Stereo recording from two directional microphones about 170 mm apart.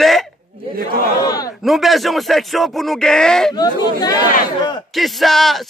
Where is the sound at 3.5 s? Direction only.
25° left (ahead or behind).